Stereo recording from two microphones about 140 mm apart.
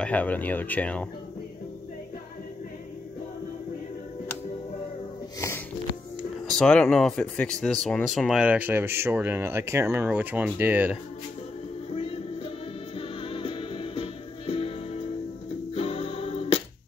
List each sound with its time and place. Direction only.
0.0 s speech: 10° left (ahead or behind)
6.4 s speech: 5° left (ahead or behind)
11.9 s music: 45° left (ahead or behind)